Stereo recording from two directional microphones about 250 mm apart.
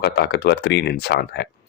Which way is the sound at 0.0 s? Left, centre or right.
Left.